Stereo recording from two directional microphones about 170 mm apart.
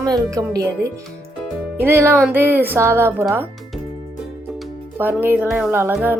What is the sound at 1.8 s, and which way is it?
Speech, 15° right (ahead or behind).